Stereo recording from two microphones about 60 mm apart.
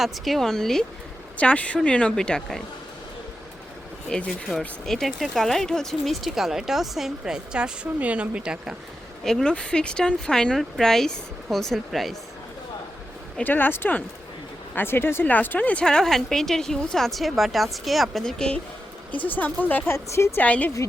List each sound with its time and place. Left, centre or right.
0.0 s speech: centre
1.4 s speech: left
4.3 s speech: centre
7.9 s speech: right
9.2 s speech: centre
13.4 s speech: left
15.3 s speech: left
15.8 s speech: centre
19.1 s speech: left
19.9 s a woman's voice: left
20.3 s speech: left